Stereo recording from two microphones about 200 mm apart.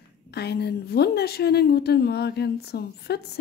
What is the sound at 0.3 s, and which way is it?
A woman's voice, 55° left (ahead or behind).